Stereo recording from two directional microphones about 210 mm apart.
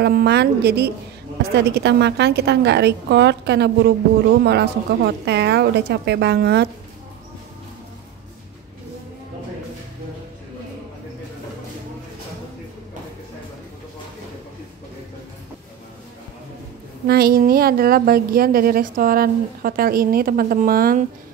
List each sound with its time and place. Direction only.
0.0 s a woman's voice: 50° right (ahead or behind)
17.1 s a woman's voice: 45° right (ahead or behind)